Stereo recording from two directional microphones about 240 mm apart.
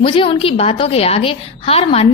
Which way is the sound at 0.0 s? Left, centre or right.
Left.